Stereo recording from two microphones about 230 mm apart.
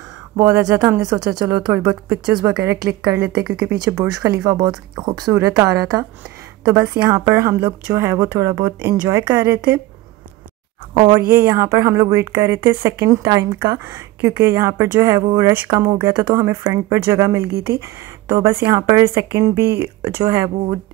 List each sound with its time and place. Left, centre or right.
0.4 s a woman's voice: centre
11.0 s a woman's voice: centre